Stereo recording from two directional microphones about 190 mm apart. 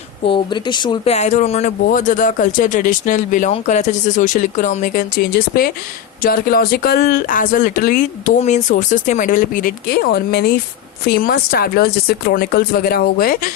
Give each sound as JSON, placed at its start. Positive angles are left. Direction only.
{"t": 0.3, "sound": "speech", "side_deg": 25}
{"t": 1.1, "sound": "speech", "side_deg": 35}